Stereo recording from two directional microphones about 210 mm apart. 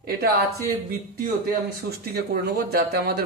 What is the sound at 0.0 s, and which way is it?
Speech, 45° right (ahead or behind).